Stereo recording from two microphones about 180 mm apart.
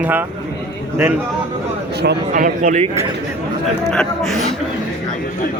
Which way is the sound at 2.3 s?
45° right (ahead or behind).